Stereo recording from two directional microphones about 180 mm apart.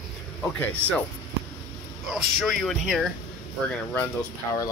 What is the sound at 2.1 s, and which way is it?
Speech, centre (ahead or behind).